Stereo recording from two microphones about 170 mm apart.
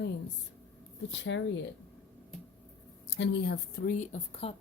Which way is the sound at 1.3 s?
90° left.